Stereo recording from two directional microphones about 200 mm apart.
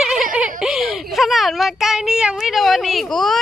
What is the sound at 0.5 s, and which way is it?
Speech, centre (ahead or behind).